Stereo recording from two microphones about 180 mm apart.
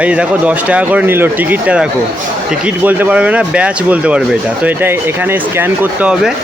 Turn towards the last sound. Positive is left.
turn(degrees=-5)  # may be behind; listen again after turning